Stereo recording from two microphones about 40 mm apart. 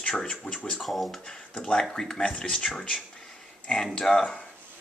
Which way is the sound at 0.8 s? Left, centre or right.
Centre.